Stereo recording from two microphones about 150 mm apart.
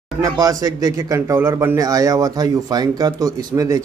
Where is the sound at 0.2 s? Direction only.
25° right (ahead or behind).